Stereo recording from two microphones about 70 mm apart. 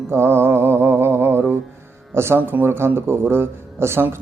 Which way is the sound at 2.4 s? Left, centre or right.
Right.